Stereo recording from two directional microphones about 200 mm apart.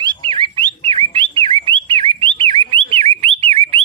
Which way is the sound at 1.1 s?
25° right (ahead or behind).